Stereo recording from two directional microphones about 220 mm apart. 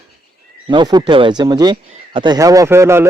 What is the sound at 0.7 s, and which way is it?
Speech, 20° right (ahead or behind).